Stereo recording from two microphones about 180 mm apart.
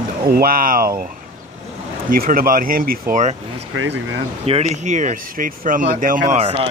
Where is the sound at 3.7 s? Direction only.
90° right.